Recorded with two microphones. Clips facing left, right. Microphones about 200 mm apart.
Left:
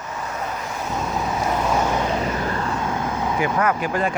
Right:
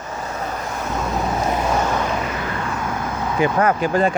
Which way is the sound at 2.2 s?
40° left (ahead or behind).